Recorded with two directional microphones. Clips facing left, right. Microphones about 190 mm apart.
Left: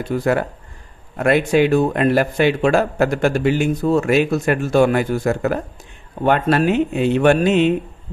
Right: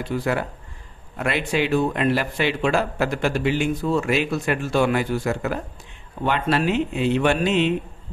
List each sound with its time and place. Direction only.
0.0 s a man's voice: 45° left (ahead or behind)